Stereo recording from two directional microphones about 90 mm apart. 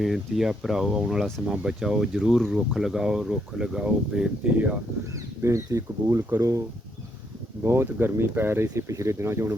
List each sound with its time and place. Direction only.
0.0 s speech: 5° right (ahead or behind)
5.1 s speech: 35° right (ahead or behind)
7.6 s speech: 25° right (ahead or behind)
8.6 s speech: 35° right (ahead or behind)